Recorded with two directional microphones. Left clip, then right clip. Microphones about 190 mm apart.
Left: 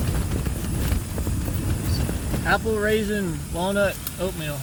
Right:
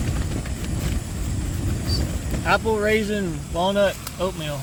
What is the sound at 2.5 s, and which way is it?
Speech, 20° right (ahead or behind).